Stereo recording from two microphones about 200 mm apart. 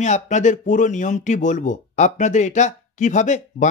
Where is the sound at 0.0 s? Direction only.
35° left (ahead or behind).